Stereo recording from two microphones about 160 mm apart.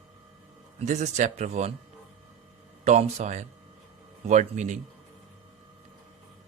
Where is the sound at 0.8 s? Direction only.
45° right (ahead or behind).